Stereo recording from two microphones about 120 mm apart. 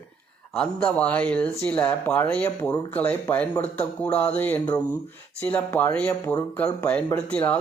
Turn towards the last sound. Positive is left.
turn(degrees=10)  # may be behind; listen again after turning